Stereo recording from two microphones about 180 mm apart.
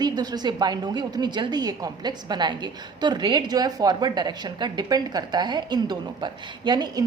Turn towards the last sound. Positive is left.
turn(degrees=-25)  # may be behind; listen again after turning